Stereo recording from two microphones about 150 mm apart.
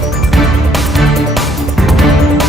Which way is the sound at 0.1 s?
Centre (ahead or behind).